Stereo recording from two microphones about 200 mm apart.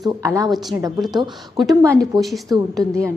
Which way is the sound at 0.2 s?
15° right (ahead or behind).